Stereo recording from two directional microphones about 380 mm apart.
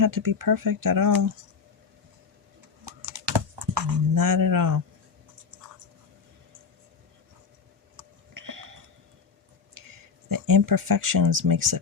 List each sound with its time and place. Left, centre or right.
0.0 s speech: right
3.0 s typing: right
7.9 s a sound: right
9.7 s speech: right